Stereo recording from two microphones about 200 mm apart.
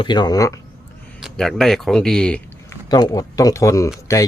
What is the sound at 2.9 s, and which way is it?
Speech, 20° left (ahead or behind).